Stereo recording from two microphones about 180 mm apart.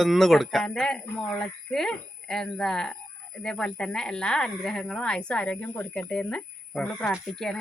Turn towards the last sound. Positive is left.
turn(degrees=0)  # may be behind; listen again after turning